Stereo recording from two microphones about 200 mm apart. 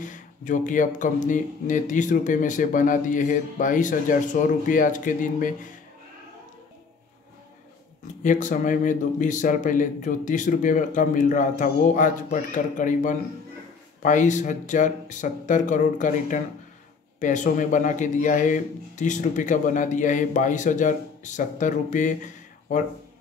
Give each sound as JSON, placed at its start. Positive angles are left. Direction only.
{"t": 0.0, "sound": "speech", "side_deg": 40}
{"t": 8.2, "sound": "speech", "side_deg": 40}